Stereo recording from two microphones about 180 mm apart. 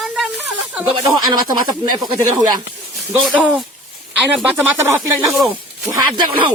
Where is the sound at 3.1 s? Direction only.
5° right (ahead or behind).